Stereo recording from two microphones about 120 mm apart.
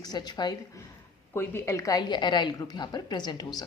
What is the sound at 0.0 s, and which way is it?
Speech, 35° left (ahead or behind).